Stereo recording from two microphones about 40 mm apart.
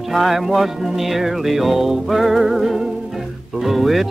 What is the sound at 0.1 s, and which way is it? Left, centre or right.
Music, centre.